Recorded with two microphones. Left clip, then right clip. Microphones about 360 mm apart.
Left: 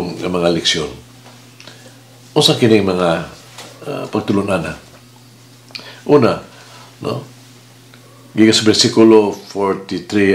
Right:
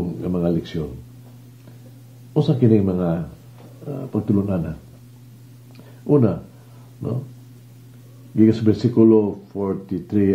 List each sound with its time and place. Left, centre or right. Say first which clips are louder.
0.1 s speech: left 9 dB; centre
2.3 s speech: left 7 dB; centre
5.7 s a sound: left 17 dB; centre
6.1 s speech: left 7 dB; centre
8.4 s speech: left 7 dB; centre